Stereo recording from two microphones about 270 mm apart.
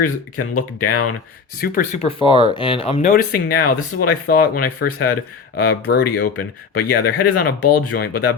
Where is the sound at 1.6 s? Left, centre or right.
Left.